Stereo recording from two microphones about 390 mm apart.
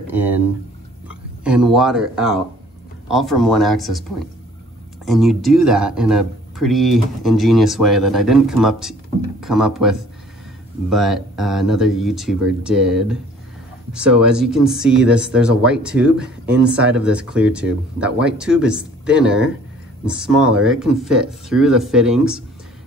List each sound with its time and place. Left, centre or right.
0.0 s a sound: centre
1.0 s speech: centre
5.0 s speech: centre